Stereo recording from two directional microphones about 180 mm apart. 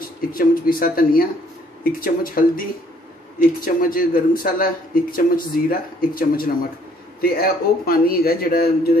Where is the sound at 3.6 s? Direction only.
55° left (ahead or behind).